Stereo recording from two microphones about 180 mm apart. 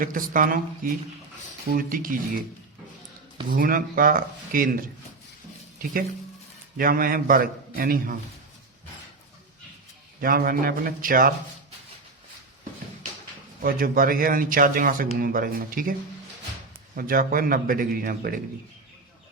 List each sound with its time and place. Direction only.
0.0 s a man's voice: 50° right (ahead or behind)
3.5 s a man's voice: 50° right (ahead or behind)
10.2 s a man's voice: 55° right (ahead or behind)
13.6 s a man's voice: 50° right (ahead or behind)